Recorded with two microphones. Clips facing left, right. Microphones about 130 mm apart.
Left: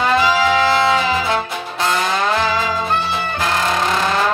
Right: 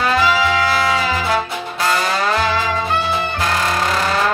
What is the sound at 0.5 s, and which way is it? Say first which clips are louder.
Music: left 2 dB; 25° left (ahead or behind).